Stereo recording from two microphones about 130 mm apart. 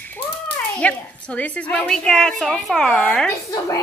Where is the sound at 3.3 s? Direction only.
25° left (ahead or behind).